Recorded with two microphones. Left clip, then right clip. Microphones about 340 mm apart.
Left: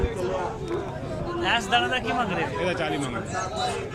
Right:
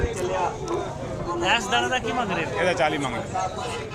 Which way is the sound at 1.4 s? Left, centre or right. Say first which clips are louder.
Right 1 dB; centre.